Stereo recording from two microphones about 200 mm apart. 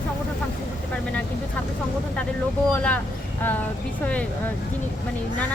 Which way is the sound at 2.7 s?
5° left (ahead or behind).